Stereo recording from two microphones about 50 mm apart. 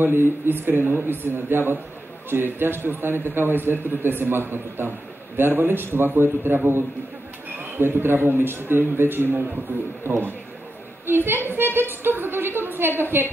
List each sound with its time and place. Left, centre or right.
0.0 s a man's voice: right